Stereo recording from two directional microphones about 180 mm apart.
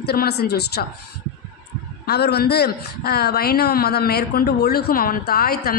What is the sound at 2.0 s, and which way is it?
A woman's voice, 65° left (ahead or behind).